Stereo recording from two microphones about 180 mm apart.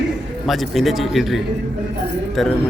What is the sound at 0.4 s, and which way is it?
Speech, centre (ahead or behind).